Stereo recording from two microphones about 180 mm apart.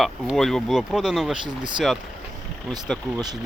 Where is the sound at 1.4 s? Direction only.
25° right (ahead or behind).